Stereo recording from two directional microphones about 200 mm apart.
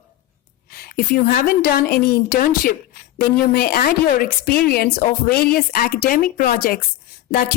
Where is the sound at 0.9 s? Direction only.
45° left (ahead or behind).